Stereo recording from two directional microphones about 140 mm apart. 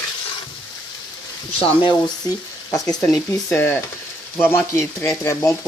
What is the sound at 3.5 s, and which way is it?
Speech, 15° left (ahead or behind).